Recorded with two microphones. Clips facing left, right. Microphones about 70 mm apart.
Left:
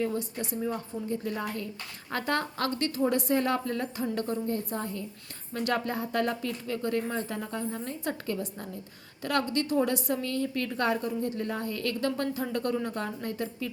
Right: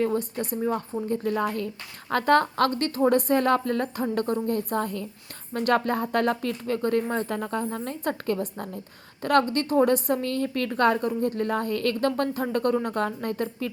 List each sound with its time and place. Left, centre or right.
0.0 s a woman's voice: right
1.0 s a woman's voice: right
5.5 s a woman's voice: right